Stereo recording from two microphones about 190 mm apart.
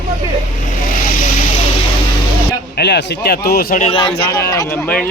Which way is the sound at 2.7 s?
60° left (ahead or behind).